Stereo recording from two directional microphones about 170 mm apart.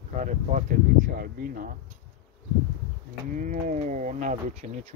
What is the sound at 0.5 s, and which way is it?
Speech, 55° right (ahead or behind).